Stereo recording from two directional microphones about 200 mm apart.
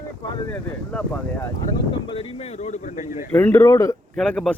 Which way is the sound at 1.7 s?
25° left (ahead or behind).